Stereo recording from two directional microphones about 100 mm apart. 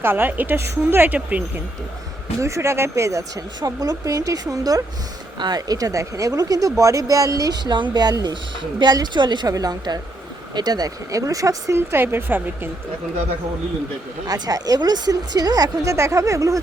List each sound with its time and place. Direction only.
0.0 s a woman's voice: 20° right (ahead or behind)
2.4 s a woman's voice: 25° right (ahead or behind)
14.3 s speech: 40° right (ahead or behind)